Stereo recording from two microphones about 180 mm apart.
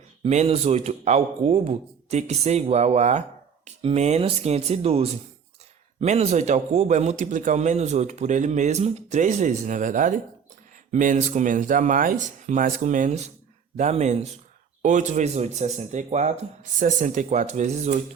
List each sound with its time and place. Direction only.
0.3 s a man's voice: 35° right (ahead or behind)